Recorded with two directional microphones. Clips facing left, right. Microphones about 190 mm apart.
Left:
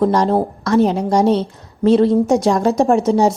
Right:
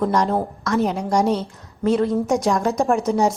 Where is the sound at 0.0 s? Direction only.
30° left (ahead or behind).